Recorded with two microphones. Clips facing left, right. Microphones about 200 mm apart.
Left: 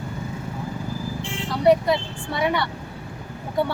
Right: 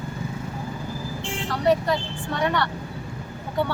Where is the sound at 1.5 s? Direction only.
10° left (ahead or behind).